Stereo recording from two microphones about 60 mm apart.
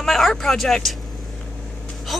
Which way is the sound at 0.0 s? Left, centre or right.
Centre.